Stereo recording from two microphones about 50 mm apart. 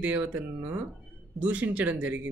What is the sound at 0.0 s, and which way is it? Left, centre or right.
A man's voice, right.